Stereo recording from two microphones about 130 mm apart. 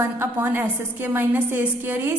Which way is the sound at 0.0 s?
15° right (ahead or behind).